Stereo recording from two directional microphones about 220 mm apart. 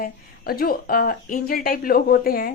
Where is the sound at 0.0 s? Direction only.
40° left (ahead or behind).